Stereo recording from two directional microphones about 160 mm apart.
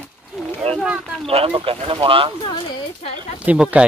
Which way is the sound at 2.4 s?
30° left (ahead or behind).